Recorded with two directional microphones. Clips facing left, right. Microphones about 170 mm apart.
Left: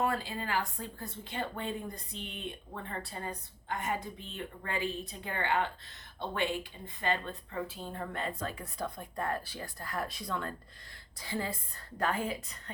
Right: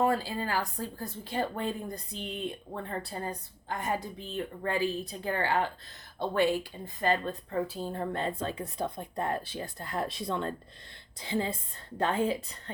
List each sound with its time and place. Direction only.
0.0 s a woman's voice: 35° right (ahead or behind)